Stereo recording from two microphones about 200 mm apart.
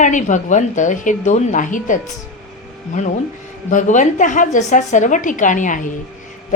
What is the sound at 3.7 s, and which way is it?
A woman's voice, 40° left (ahead or behind).